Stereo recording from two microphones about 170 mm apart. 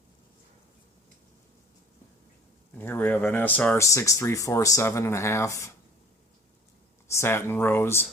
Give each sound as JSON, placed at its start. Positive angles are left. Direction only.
{"t": 2.7, "sound": "speech", "side_deg": 10}
{"t": 7.1, "sound": "speech", "side_deg": 15}